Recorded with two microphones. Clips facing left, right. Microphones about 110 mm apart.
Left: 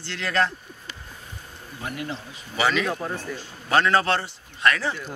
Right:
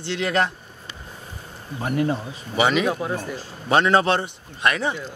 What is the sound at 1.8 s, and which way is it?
Speech, 35° right (ahead or behind).